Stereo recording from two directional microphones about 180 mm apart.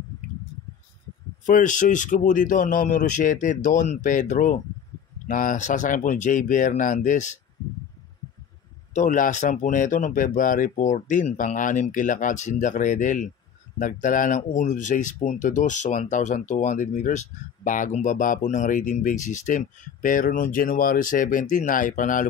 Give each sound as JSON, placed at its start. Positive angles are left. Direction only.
{"t": 1.4, "sound": "speech", "side_deg": 45}
{"t": 8.9, "sound": "speech", "side_deg": 45}